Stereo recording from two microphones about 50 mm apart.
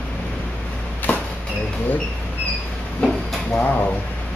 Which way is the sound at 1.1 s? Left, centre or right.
Left.